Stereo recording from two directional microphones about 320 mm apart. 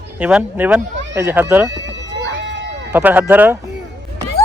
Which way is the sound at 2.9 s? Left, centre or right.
Centre.